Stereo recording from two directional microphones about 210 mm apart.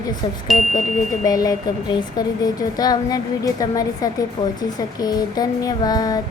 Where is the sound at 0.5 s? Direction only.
Centre (ahead or behind).